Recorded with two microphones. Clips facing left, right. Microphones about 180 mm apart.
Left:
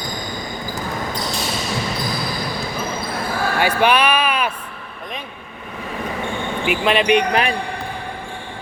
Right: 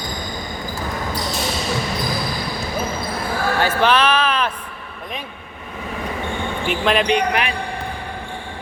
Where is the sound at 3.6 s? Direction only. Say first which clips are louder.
Left 1 dB; 15° left (ahead or behind).